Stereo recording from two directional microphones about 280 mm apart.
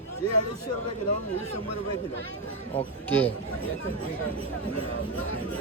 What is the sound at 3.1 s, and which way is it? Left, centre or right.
Speech, centre.